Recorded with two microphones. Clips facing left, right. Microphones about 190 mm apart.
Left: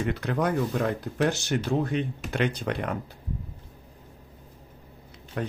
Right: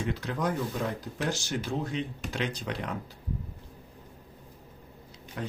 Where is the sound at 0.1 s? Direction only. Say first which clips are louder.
Left 4 dB; 60° left (ahead or behind).